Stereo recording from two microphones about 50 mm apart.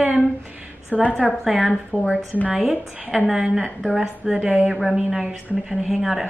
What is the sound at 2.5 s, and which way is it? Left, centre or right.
Speech, centre.